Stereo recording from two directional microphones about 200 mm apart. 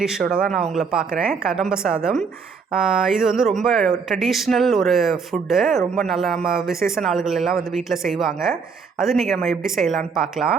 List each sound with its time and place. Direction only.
0.0 s speech: 5° right (ahead or behind)